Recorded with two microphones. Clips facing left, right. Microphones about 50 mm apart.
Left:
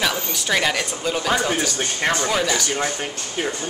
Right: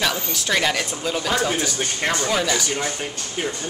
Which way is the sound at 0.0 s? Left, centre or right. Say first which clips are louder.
Left 1 dB; centre.